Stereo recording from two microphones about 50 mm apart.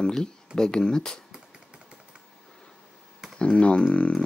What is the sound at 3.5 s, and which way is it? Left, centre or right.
Speech, centre.